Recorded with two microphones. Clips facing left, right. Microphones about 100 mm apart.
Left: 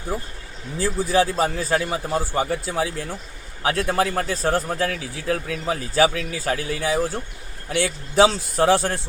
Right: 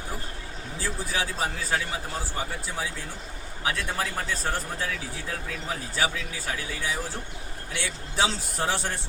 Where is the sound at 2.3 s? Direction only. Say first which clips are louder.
Left 9 dB; 65° left (ahead or behind).